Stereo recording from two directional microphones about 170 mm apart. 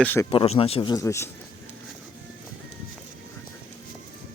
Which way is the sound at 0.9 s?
20° left (ahead or behind).